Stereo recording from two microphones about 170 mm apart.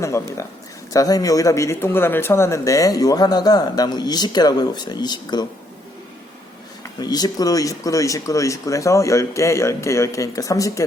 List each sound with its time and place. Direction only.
0.0 s speech: 15° left (ahead or behind)
7.0 s speech: 25° left (ahead or behind)